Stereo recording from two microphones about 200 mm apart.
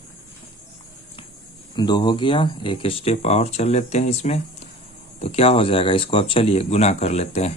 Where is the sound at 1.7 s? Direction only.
20° left (ahead or behind).